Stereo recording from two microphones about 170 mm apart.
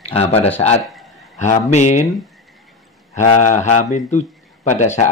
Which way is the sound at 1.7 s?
45° left (ahead or behind).